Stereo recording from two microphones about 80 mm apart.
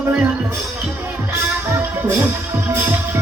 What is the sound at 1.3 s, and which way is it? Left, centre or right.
Music, right.